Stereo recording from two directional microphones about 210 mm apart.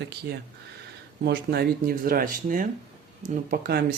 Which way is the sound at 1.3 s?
50° right (ahead or behind).